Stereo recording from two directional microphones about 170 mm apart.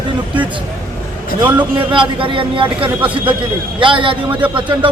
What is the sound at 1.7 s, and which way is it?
A man's voice, 30° right (ahead or behind).